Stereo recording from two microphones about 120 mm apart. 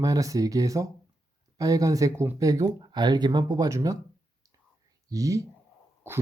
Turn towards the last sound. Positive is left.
turn(degrees=-20)  # may be behind; listen again after turning